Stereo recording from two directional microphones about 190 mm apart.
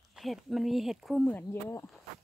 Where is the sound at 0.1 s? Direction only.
Centre (ahead or behind).